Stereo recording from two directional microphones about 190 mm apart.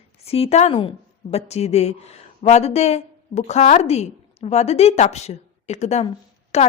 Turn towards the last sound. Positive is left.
turn(degrees=35)  # may be behind; listen again after turning